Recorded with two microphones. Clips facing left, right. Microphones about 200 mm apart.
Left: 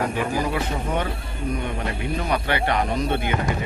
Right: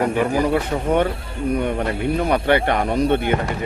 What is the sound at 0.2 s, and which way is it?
Speech, 50° right (ahead or behind).